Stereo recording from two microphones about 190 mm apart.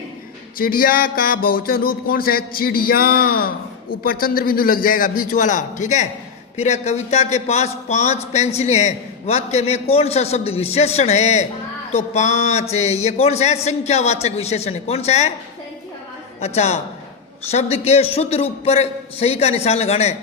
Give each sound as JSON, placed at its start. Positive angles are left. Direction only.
{"t": 0.6, "sound": "a sound", "side_deg": 50}
{"t": 6.6, "sound": "a man's voice", "side_deg": 35}
{"t": 16.4, "sound": "a man's voice", "side_deg": 35}